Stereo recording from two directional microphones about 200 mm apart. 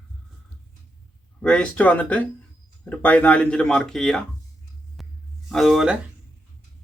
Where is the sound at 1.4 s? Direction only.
5° left (ahead or behind).